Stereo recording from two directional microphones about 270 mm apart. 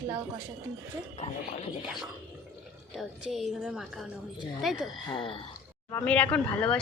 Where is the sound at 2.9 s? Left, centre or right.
Centre.